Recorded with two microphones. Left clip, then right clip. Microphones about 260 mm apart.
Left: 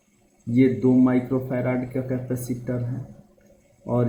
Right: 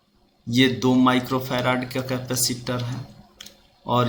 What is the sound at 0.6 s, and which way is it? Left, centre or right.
Speech, right.